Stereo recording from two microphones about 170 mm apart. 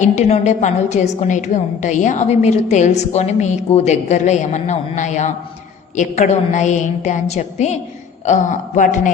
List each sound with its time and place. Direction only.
0.0 s a woman's voice: 45° left (ahead or behind)